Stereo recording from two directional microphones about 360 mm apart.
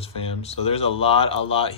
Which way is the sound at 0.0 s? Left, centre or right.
Centre.